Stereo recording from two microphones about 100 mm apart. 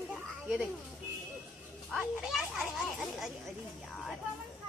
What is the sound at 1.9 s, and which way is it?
A child's voice, 5° right (ahead or behind).